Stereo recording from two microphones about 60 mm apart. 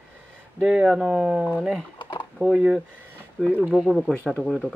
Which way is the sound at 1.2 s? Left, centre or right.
Centre.